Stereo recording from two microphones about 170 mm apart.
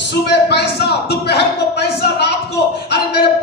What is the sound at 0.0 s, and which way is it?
A man's voice, 85° left.